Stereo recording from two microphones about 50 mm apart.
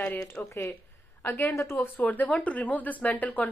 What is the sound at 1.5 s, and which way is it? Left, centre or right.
Speech, left.